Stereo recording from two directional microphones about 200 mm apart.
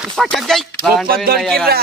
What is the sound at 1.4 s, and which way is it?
Speech, 5° left (ahead or behind).